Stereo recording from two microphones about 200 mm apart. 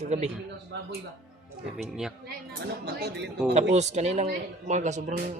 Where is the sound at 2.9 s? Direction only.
55° right (ahead or behind).